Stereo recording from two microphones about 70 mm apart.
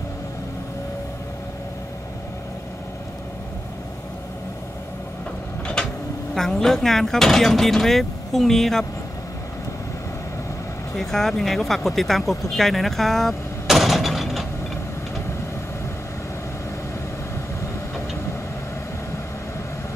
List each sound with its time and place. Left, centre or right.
5.8 s a sound: centre
6.3 s speech: centre
11.0 s speech: centre